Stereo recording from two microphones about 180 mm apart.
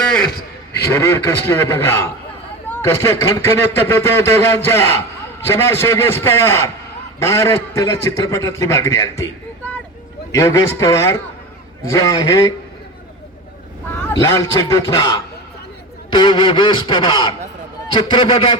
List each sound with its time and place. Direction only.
0.9 s speech: 15° left (ahead or behind)
10.3 s speech: 15° left (ahead or behind)
14.1 s speech: 20° left (ahead or behind)